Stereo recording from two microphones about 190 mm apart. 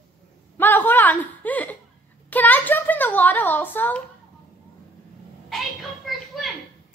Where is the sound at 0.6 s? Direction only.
10° left (ahead or behind).